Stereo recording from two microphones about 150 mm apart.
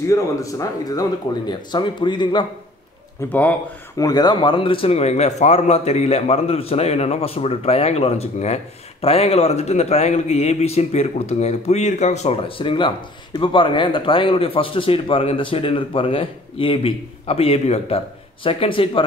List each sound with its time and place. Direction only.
0.1 s a man's voice: 20° left (ahead or behind)
3.3 s speech: 10° left (ahead or behind)
4.0 s a man's voice: 25° left (ahead or behind)